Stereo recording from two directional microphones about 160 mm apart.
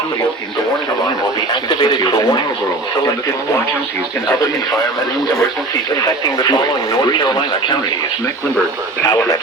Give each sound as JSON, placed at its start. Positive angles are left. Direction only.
{"t": 1.7, "sound": "speech", "side_deg": 30}
{"t": 6.4, "sound": "speech", "side_deg": 25}
{"t": 9.0, "sound": "speech", "side_deg": 25}